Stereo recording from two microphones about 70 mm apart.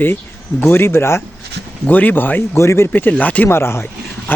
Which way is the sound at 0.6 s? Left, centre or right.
Left.